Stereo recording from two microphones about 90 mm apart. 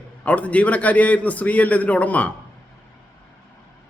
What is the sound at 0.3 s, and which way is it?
A man's voice, 15° left (ahead or behind).